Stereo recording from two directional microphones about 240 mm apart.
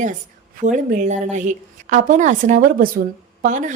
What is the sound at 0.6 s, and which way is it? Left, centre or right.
A woman's voice, right.